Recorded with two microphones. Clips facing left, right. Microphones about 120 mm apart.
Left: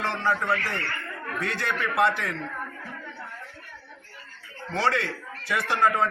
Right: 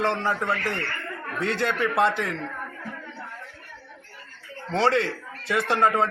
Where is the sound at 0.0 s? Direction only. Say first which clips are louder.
Right 2 dB; 20° right (ahead or behind).